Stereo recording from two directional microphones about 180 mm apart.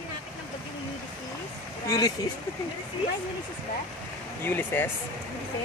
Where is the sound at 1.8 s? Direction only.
20° left (ahead or behind).